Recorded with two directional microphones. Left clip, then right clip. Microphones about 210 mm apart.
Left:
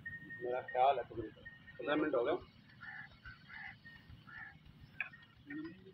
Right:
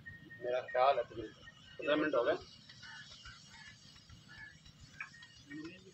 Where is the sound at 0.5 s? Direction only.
25° right (ahead or behind).